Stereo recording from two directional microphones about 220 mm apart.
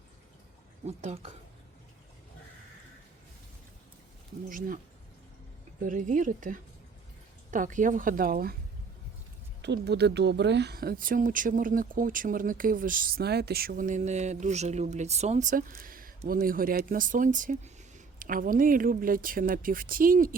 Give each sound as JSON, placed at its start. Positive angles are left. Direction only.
{"t": 0.9, "sound": "speech", "side_deg": -30}
{"t": 4.4, "sound": "speech", "side_deg": -40}
{"t": 5.8, "sound": "speech", "side_deg": -35}
{"t": 9.6, "sound": "speech", "side_deg": -50}